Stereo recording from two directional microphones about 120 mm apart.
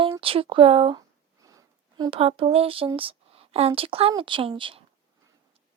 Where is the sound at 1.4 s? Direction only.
30° right (ahead or behind).